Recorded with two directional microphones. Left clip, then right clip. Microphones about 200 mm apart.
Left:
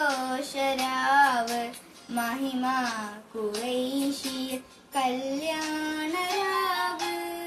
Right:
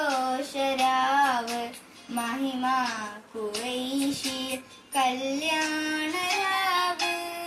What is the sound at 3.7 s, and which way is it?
Child singing, 20° left (ahead or behind).